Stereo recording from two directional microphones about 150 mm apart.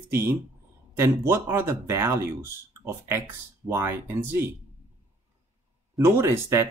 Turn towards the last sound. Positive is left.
turn(degrees=-15)  # may be behind; listen again after turning